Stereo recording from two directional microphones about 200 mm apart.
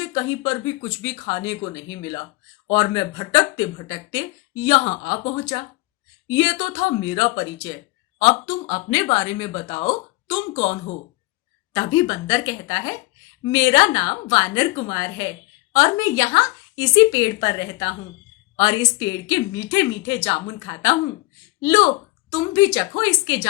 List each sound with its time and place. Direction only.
0.0 s speech: 20° left (ahead or behind)
10.6 s speech: 35° left (ahead or behind)
11.7 s speech: 20° left (ahead or behind)